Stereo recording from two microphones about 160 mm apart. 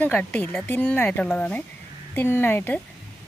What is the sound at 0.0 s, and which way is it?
Speech, 10° left (ahead or behind).